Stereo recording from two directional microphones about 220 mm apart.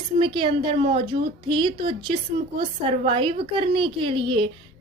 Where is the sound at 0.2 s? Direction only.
20° right (ahead or behind).